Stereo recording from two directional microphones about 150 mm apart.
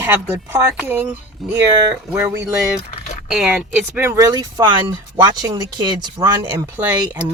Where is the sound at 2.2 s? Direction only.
20° right (ahead or behind).